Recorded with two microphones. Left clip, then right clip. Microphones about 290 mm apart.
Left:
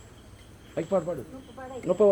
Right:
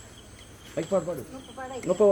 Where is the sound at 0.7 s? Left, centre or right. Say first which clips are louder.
Even; centre.